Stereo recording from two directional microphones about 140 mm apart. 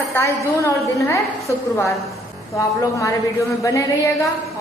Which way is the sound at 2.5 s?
20° left (ahead or behind).